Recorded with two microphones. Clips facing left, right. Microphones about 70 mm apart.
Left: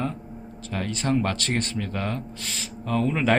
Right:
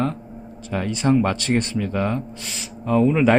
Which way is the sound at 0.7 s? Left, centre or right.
Centre.